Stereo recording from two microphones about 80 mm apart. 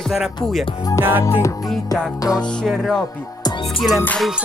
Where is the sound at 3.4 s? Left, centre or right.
Left.